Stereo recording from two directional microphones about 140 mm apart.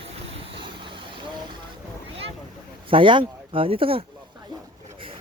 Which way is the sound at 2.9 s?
35° right (ahead or behind).